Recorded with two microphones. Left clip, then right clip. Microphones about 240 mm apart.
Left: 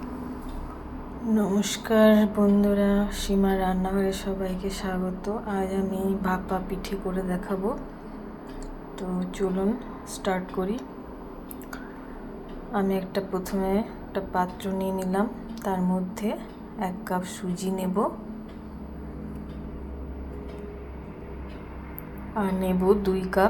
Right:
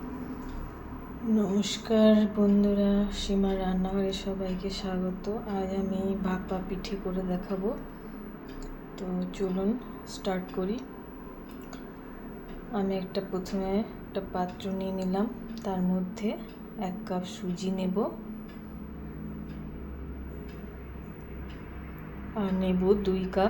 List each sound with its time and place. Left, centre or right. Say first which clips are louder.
1.3 s speech: left 3 dB; centre
9.0 s speech: left 4 dB; centre
12.7 s a woman's voice: left 4 dB; centre
22.8 s speech: left 3 dB; centre